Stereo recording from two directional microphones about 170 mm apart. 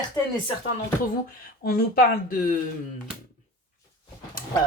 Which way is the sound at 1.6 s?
60° left (ahead or behind).